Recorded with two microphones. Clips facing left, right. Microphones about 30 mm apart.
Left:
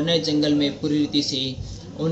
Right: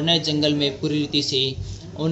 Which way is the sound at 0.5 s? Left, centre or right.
Right.